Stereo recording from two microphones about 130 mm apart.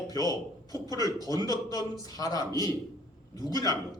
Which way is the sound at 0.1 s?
30° left (ahead or behind).